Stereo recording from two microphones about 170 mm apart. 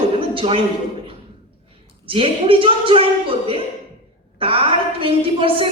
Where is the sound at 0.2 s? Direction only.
30° right (ahead or behind).